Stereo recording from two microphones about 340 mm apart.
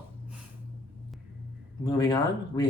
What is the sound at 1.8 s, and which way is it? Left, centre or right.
Speech, centre.